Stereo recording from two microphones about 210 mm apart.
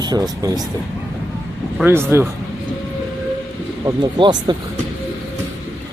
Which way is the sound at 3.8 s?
20° right (ahead or behind).